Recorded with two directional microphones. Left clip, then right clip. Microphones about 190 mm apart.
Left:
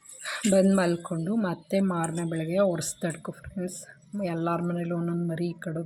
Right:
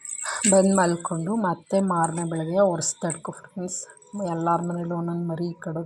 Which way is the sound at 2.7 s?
25° left (ahead or behind).